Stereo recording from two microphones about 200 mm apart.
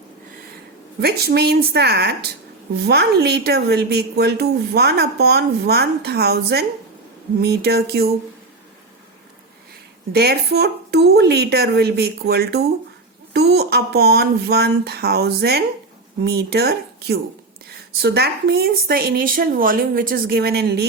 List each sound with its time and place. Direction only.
1.0 s a woman's voice: 55° right (ahead or behind)
10.1 s a woman's voice: 55° right (ahead or behind)